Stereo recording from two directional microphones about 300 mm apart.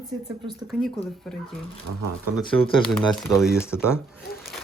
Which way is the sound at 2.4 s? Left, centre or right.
Centre.